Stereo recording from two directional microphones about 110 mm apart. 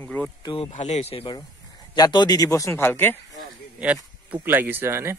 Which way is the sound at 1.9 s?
40° left (ahead or behind).